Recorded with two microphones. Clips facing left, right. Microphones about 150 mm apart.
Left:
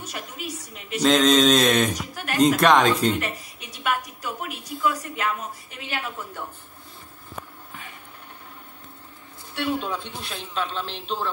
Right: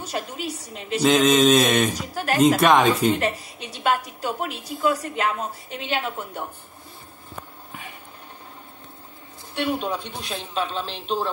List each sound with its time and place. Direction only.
0.0 s a woman's voice: 30° right (ahead or behind)
1.0 s mantra: 5° right (ahead or behind)
2.0 s a woman's voice: 30° right (ahead or behind)
2.6 s mantra: centre (ahead or behind)
3.1 s a woman's voice: 30° right (ahead or behind)
9.6 s speech: 15° right (ahead or behind)